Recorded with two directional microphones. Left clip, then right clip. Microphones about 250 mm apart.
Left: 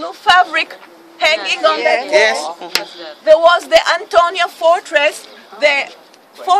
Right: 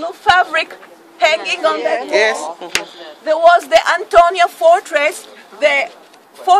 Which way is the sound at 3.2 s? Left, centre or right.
Centre.